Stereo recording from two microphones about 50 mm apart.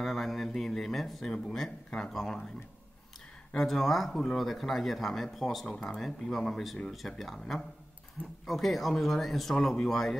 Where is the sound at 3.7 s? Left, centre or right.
Centre.